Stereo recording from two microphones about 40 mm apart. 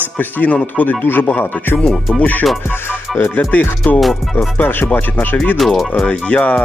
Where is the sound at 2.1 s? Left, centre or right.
Left.